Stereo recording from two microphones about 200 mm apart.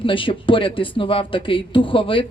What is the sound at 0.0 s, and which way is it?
Speech, 25° left (ahead or behind).